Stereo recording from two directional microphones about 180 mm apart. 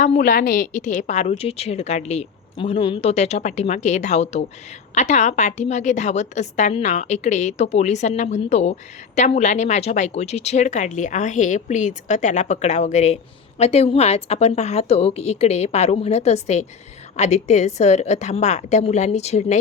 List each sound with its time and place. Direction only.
0.0 s a woman's voice: 45° left (ahead or behind)